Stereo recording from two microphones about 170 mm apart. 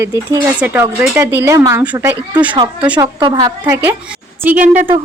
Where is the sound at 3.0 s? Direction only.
25° right (ahead or behind).